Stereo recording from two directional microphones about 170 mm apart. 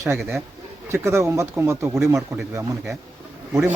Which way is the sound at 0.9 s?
15° right (ahead or behind).